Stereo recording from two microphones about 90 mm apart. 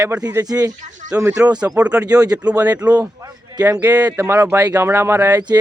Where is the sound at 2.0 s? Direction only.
45° right (ahead or behind).